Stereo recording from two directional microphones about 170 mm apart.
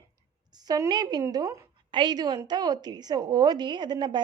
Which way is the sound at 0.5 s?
25° right (ahead or behind).